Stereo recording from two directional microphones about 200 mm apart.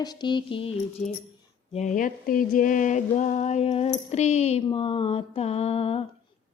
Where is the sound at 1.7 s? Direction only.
35° left (ahead or behind).